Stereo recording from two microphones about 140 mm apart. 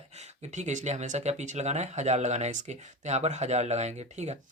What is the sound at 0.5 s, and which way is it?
Speech, 60° right (ahead or behind).